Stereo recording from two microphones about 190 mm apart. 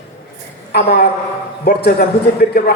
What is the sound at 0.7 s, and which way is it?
A man's voice, 55° left (ahead or behind).